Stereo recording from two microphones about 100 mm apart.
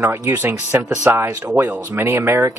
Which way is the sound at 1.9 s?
25° right (ahead or behind).